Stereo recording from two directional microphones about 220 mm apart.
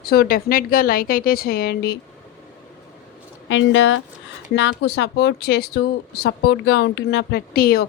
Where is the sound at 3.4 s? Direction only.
60° left (ahead or behind).